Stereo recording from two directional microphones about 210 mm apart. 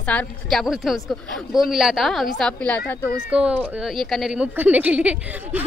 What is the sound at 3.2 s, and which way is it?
A woman's voice, 5° right (ahead or behind).